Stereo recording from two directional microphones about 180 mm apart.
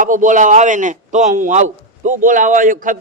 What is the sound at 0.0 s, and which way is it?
A man's voice, 45° right (ahead or behind).